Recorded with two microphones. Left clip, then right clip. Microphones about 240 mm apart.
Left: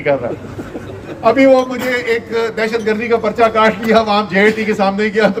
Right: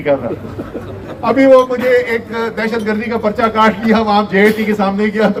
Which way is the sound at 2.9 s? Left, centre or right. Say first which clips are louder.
Left 2 dB; left.